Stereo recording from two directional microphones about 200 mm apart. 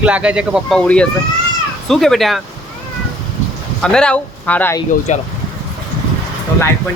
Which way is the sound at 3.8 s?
5° left (ahead or behind).